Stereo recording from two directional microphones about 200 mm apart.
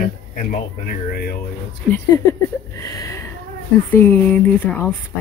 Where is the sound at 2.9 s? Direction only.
15° left (ahead or behind).